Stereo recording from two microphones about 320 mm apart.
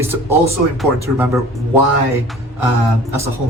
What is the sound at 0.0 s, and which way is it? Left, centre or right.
Speech, centre.